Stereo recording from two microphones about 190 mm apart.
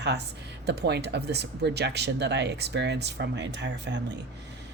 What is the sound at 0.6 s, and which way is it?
Speech, 60° right (ahead or behind).